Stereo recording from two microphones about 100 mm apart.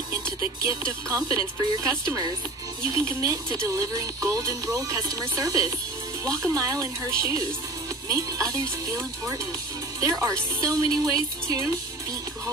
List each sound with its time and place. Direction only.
0.4 s speech: 30° right (ahead or behind)